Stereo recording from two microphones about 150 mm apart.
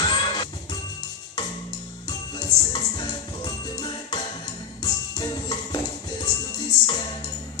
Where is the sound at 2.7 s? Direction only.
30° left (ahead or behind).